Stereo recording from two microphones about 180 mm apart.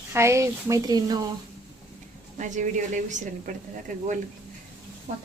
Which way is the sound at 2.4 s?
45° right (ahead or behind).